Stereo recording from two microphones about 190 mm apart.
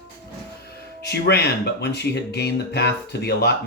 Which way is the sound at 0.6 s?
60° left (ahead or behind).